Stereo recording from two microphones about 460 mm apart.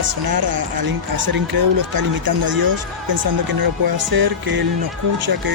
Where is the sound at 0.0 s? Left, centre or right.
Right.